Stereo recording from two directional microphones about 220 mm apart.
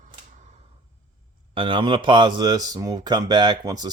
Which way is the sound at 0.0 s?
30° right (ahead or behind).